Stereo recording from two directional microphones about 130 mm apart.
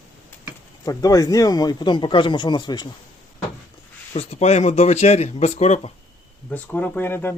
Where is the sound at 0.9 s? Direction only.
25° left (ahead or behind).